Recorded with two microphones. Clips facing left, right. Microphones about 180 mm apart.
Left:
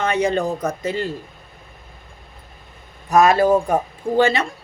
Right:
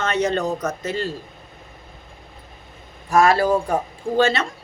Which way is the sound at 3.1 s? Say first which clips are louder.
Left 2 dB; 20° left (ahead or behind).